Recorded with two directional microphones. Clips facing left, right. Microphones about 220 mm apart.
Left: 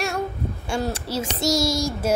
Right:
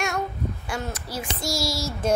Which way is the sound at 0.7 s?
30° left (ahead or behind).